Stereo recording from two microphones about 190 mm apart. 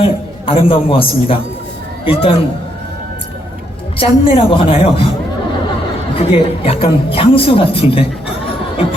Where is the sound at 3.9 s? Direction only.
30° left (ahead or behind).